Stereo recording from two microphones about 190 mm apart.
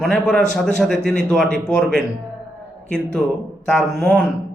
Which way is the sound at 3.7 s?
Centre (ahead or behind).